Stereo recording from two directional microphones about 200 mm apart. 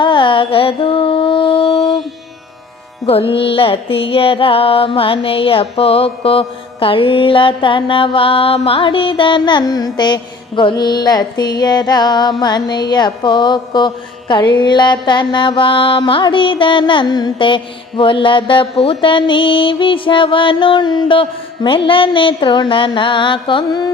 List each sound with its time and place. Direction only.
0.0 s carnatic music: 25° left (ahead or behind)
3.1 s mantra: 30° left (ahead or behind)